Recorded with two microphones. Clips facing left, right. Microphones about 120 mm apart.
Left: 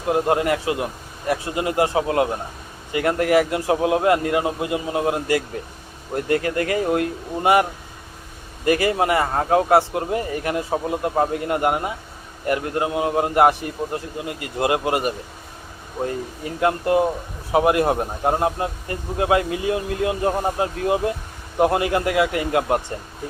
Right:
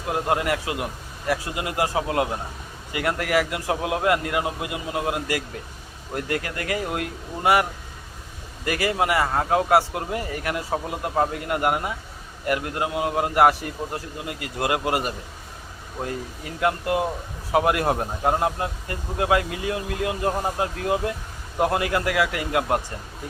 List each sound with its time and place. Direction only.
0.1 s speech: 25° left (ahead or behind)
16.4 s speech: 30° left (ahead or behind)